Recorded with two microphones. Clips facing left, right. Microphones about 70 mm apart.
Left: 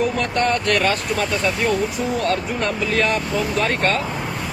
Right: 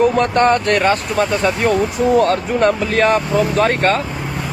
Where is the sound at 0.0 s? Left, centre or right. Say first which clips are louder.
Right 7 dB; right.